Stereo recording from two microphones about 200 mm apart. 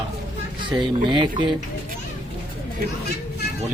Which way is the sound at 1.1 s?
25° right (ahead or behind).